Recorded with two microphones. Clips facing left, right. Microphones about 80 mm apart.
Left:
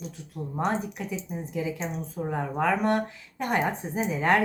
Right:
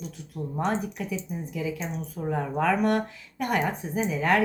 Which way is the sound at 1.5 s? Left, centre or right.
Left.